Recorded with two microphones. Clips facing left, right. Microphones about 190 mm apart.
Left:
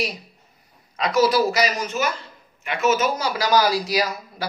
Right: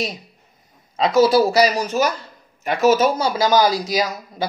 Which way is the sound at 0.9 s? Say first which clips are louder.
Right 4 dB; 25° right (ahead or behind).